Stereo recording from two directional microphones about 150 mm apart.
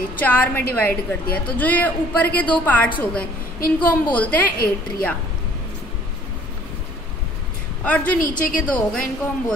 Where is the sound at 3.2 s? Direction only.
75° left (ahead or behind).